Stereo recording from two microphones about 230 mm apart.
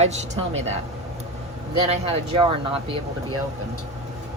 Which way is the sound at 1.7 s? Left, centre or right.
Right.